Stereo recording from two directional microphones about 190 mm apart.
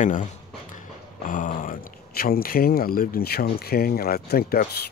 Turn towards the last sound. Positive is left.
turn(degrees=55)  # may be behind; listen again after turning